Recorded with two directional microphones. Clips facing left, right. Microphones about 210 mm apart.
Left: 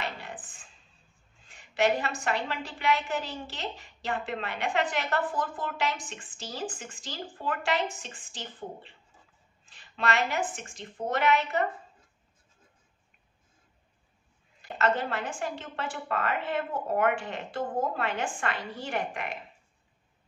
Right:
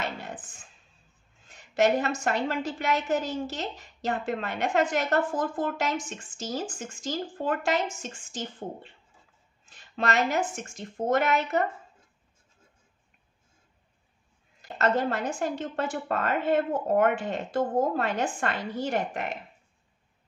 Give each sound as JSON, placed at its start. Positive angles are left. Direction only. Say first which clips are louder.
{"t": 0.0, "sound": "a sound", "louder": "right 3 dB", "side_deg": -45}
{"t": 1.5, "sound": "a woman's voice", "louder": "right 3 dB", "side_deg": -40}
{"t": 14.6, "sound": "a woman's voice", "louder": "right 2 dB", "side_deg": -40}